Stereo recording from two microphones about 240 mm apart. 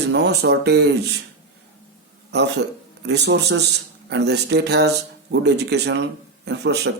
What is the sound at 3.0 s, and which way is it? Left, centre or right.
Speech, right.